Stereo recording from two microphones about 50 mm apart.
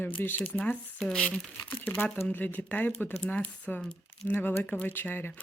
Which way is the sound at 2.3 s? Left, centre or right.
Left.